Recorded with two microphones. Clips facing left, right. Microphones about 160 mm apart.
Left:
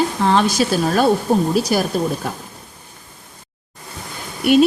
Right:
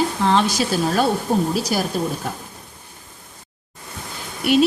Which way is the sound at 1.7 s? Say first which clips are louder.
Left 4 dB; 55° left (ahead or behind).